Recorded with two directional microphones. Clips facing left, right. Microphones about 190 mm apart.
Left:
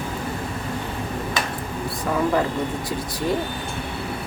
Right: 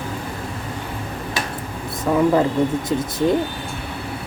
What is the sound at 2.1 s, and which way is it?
Speech, 25° right (ahead or behind).